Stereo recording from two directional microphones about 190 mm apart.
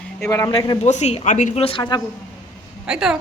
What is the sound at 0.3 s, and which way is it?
Speech, 15° left (ahead or behind).